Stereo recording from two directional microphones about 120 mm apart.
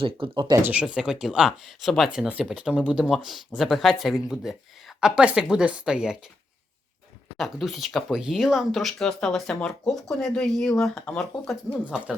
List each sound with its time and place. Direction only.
0.0 s speech: 40° right (ahead or behind)
0.6 s speech: 10° right (ahead or behind)
7.3 s speech: centre (ahead or behind)